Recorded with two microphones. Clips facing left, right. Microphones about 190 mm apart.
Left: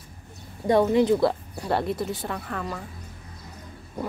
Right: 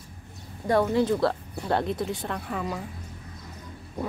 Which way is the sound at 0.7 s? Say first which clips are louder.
Left 3 dB; 20° left (ahead or behind).